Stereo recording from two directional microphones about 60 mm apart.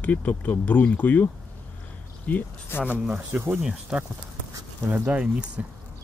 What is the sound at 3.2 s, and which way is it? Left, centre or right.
Speech, right.